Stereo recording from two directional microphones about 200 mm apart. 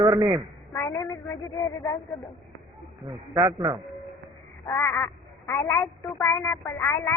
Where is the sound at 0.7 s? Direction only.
15° left (ahead or behind).